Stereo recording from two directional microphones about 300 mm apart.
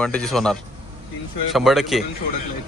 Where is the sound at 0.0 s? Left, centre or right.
Centre.